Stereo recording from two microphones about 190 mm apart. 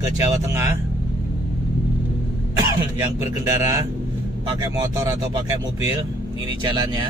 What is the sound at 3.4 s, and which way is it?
Speech, 15° right (ahead or behind).